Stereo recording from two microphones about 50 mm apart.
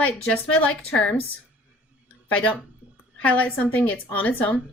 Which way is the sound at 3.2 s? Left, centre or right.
Left.